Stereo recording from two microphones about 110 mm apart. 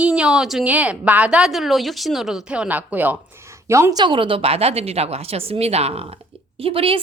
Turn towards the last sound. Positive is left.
turn(degrees=-55)  # may be behind; listen again after turning